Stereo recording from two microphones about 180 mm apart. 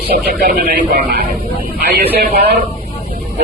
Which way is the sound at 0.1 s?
55° right (ahead or behind).